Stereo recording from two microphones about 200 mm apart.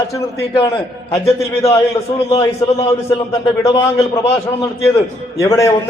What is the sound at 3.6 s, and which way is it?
Speech, 15° left (ahead or behind).